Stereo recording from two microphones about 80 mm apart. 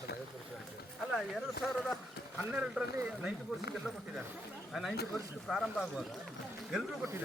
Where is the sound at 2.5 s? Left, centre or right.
Centre.